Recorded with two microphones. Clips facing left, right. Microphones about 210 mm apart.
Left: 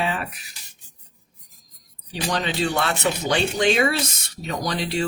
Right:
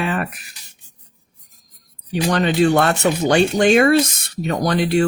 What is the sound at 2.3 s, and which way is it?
Speech, 55° right (ahead or behind).